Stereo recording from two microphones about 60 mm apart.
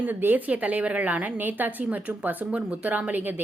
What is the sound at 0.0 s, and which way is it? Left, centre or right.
A woman's voice, right.